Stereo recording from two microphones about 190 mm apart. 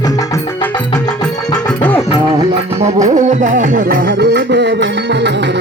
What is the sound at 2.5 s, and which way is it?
Music, 35° right (ahead or behind).